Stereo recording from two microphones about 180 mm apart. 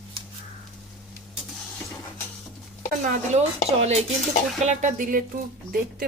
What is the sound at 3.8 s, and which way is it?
Dishes, 35° right (ahead or behind).